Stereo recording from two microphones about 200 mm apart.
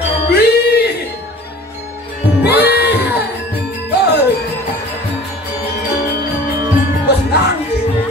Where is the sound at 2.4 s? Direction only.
10° right (ahead or behind).